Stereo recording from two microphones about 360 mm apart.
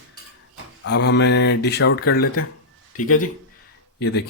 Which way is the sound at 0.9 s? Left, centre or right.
Left.